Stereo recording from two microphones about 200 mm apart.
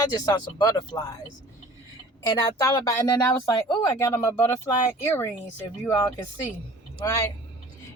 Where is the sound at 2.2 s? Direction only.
20° left (ahead or behind).